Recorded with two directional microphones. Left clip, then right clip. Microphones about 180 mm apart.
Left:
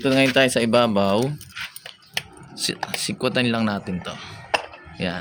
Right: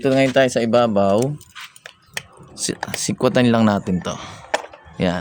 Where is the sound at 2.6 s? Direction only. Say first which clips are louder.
Right 1 dB; 50° right (ahead or behind).